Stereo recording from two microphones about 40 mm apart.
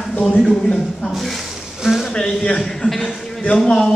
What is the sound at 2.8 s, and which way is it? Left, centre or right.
Speech, left.